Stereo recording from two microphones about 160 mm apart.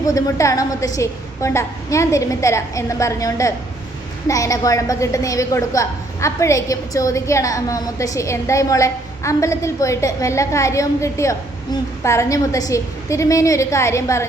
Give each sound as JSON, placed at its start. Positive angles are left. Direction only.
{"t": 0.0, "sound": "a woman's voice", "side_deg": 20}